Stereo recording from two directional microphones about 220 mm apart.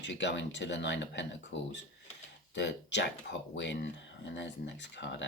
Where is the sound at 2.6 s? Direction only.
50° left (ahead or behind).